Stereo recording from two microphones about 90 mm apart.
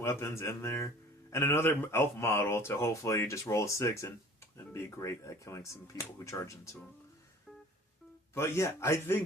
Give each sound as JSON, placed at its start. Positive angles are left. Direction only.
{"t": 0.0, "sound": "speech", "side_deg": 30}
{"t": 8.4, "sound": "a man's voice", "side_deg": 30}